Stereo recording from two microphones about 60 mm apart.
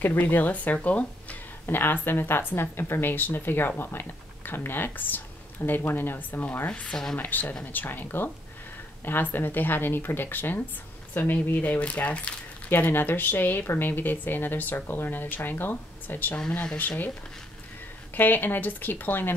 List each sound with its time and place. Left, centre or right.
0.0 s speech: left
1.7 s speech: left
6.7 s speech: centre
7.2 s speech: left
16.3 s speech: centre
16.7 s speech: left
18.1 s speech: left